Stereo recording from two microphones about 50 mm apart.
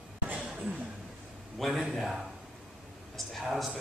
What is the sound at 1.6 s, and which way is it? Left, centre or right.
Speech, centre.